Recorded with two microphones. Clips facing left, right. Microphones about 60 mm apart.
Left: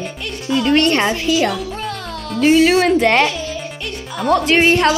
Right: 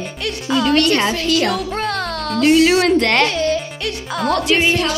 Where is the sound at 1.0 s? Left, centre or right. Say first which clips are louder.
Left 1 dB; centre.